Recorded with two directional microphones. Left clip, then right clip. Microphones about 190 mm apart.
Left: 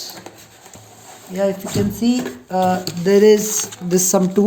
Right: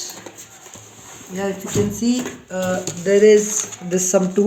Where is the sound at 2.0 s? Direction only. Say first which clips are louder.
Left 2 dB; 50° left (ahead or behind).